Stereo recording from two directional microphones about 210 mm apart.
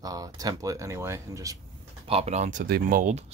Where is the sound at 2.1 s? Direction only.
30° right (ahead or behind).